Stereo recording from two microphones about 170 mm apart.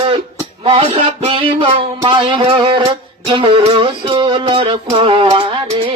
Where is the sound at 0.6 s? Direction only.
35° right (ahead or behind).